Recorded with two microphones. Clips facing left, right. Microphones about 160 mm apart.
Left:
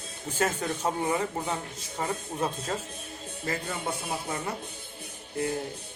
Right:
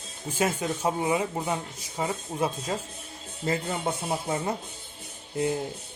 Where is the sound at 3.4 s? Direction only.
25° right (ahead or behind).